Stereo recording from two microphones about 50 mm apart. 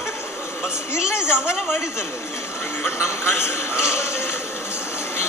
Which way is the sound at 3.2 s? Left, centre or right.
Left.